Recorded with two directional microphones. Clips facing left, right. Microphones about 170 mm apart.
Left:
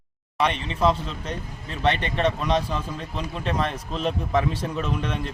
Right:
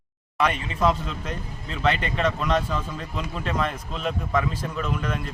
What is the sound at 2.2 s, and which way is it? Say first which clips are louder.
Speech: left 1 dB; 30° left (ahead or behind).